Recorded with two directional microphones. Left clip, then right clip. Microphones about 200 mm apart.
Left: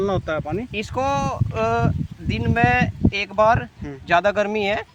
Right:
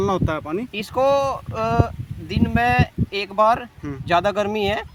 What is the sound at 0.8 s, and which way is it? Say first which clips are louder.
Speech: right 5 dB; 5° left (ahead or behind).